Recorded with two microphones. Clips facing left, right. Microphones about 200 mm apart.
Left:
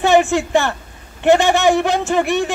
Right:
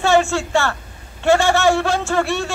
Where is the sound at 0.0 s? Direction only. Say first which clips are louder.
Left 2 dB; 15° left (ahead or behind).